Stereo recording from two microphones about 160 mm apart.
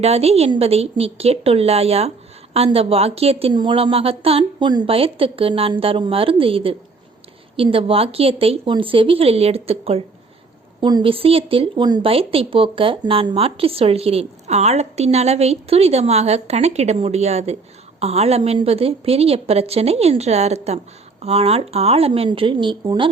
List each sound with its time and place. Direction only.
0.0 s speech: 40° right (ahead or behind)
10.8 s speech: 30° right (ahead or behind)